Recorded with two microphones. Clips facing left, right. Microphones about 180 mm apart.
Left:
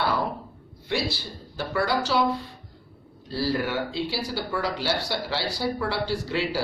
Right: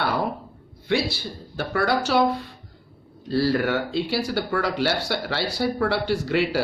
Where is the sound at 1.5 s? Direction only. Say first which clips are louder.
Right 2 dB; 60° right (ahead or behind).